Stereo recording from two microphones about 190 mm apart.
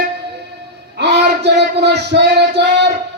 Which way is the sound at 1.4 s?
65° right (ahead or behind).